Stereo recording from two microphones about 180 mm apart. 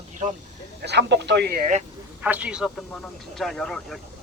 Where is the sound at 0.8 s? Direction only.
70° right (ahead or behind).